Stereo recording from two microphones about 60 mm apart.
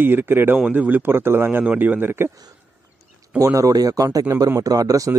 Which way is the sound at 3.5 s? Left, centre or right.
Right.